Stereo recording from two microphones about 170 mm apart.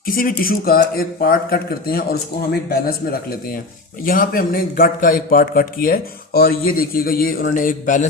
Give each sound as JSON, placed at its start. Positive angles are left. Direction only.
{"t": 0.0, "sound": "a man's voice", "side_deg": 60}